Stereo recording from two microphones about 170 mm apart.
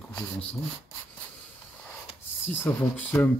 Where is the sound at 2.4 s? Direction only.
15° left (ahead or behind).